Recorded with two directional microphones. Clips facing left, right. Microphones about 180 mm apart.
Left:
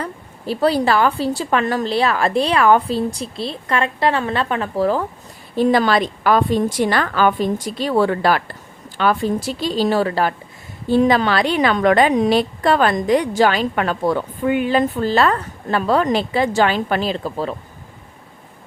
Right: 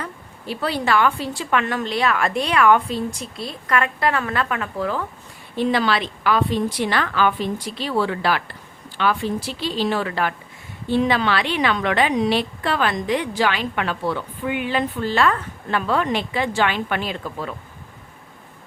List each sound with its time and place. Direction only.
0.0 s a woman's voice: 35° left (ahead or behind)